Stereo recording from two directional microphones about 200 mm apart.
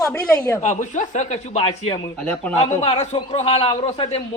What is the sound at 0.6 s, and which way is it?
A man's voice, 35° left (ahead or behind).